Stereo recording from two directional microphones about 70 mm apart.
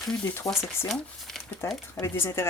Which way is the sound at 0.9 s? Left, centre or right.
Centre.